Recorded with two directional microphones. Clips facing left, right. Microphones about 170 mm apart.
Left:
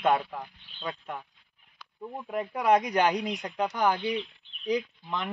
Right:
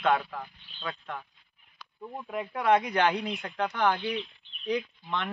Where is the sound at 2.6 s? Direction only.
40° left (ahead or behind).